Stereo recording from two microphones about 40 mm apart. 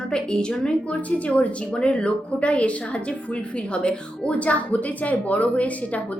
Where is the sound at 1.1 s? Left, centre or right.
Left.